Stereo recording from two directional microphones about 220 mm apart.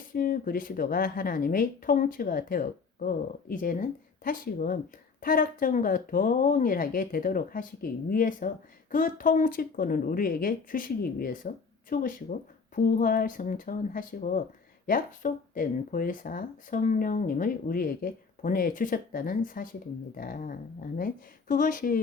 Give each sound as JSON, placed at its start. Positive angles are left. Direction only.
{"t": 0.1, "sound": "speech", "side_deg": 40}